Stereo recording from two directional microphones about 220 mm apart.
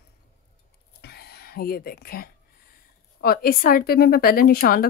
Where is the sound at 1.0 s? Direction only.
45° left (ahead or behind).